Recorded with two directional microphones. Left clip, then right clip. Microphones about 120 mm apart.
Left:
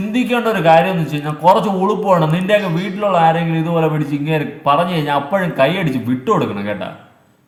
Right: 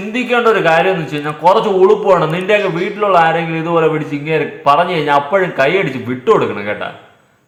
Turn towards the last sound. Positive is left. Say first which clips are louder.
# right 3 dB
turn(degrees=15)  # may be behind; listen again after turning